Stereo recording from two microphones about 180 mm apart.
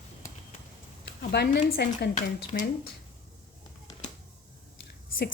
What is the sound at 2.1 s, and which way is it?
Speech, 45° left (ahead or behind).